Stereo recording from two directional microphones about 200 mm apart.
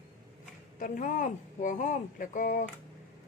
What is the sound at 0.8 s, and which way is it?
Speech, 40° left (ahead or behind).